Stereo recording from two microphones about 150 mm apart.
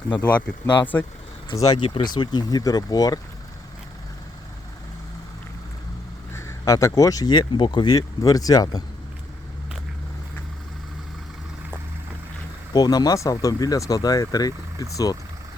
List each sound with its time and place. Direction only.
0.1 s speech: 10° left (ahead or behind)
1.5 s speech: 25° left (ahead or behind)
6.3 s speech: 20° left (ahead or behind)
12.7 s speech: 25° left (ahead or behind)